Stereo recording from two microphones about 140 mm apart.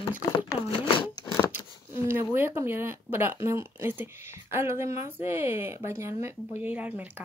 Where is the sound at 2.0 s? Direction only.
15° right (ahead or behind).